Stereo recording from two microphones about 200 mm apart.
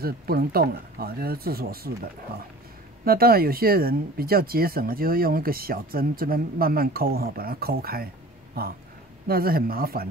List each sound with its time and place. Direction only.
0.0 s speech: 50° right (ahead or behind)
3.1 s speech: 50° right (ahead or behind)